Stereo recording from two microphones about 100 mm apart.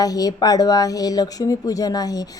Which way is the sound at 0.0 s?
40° left (ahead or behind).